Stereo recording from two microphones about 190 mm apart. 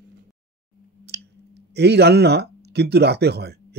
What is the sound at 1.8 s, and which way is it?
Speech, 60° right (ahead or behind).